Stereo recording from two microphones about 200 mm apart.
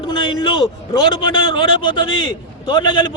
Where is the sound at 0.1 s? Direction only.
25° left (ahead or behind).